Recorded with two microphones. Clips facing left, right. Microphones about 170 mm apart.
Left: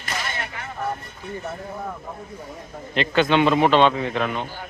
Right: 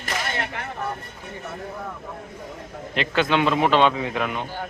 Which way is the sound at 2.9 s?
5° right (ahead or behind).